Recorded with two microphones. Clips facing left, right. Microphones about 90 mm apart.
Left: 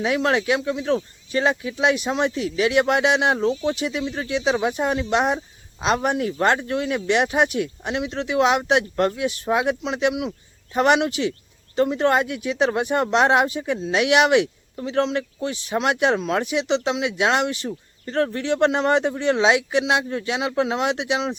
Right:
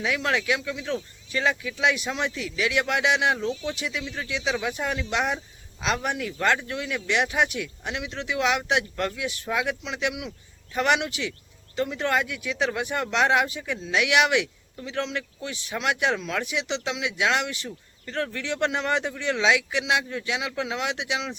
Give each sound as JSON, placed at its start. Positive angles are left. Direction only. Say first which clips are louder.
{"t": 0.0, "sound": "speech", "louder": "left 5 dB", "side_deg": 35}